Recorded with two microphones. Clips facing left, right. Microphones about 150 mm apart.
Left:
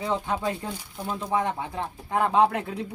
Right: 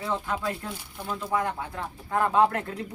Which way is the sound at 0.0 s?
20° left (ahead or behind).